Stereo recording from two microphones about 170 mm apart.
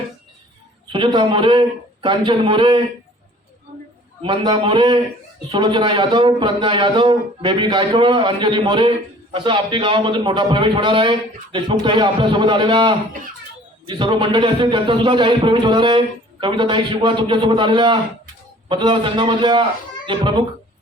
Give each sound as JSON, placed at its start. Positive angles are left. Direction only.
{"t": 0.9, "sound": "a man's voice", "side_deg": -30}
{"t": 4.2, "sound": "a man's voice", "side_deg": -30}